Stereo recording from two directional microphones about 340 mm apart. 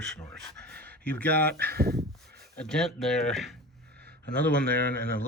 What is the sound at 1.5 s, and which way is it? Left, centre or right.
Speech, right.